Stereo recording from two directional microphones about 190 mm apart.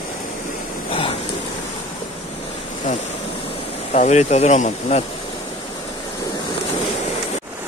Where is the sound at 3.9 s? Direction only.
35° left (ahead or behind).